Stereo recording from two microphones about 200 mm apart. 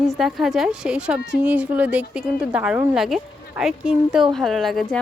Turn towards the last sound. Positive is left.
turn(degrees=0)  # may be behind; listen again after turning